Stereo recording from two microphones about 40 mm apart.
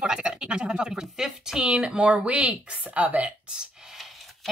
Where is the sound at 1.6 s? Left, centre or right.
Right.